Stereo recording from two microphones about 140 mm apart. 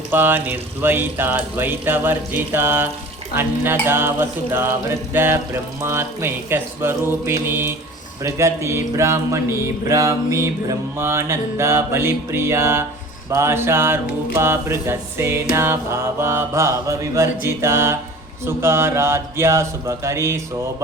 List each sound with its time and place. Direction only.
0.1 s speech: 15° right (ahead or behind)
8.2 s mantra: 20° right (ahead or behind)
13.3 s speech: 20° right (ahead or behind)
15.5 s mantra: 20° right (ahead or behind)